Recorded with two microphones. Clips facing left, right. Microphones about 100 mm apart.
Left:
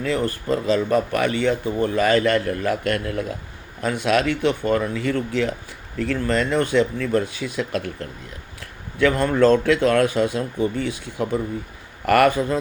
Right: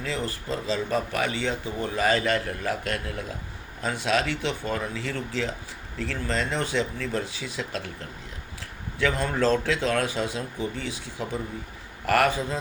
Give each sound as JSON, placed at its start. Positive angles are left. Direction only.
{"t": 0.0, "sound": "speech", "side_deg": 55}
{"t": 9.0, "sound": "speech", "side_deg": 55}